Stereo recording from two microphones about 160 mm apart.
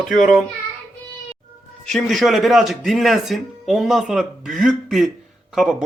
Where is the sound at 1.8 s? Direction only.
Centre (ahead or behind).